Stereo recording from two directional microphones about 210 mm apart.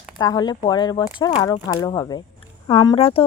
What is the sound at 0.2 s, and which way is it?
Speech, 20° left (ahead or behind).